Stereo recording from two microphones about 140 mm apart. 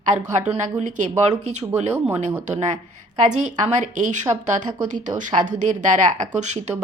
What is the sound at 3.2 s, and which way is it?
A woman's voice, 55° right (ahead or behind).